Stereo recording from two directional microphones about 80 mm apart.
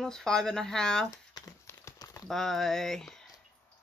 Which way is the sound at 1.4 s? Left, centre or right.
Left.